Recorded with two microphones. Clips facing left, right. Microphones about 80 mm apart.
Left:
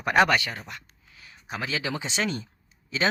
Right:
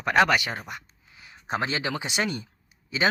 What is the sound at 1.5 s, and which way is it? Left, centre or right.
Speech, right.